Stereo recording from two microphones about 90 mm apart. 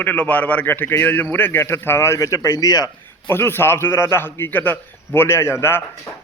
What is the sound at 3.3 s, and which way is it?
A man's voice, 25° left (ahead or behind).